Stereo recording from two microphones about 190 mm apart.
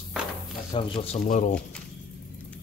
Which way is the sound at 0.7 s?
30° left (ahead or behind).